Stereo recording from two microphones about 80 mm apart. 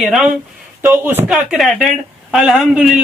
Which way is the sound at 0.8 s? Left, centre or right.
Right.